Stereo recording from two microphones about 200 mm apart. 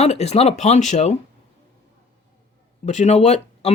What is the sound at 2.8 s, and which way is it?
Speech, 35° left (ahead or behind).